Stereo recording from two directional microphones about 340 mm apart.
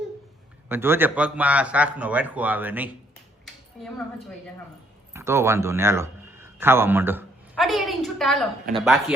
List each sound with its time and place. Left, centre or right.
0.7 s a man's voice: centre
3.4 s a sound: centre
5.1 s a man's voice: centre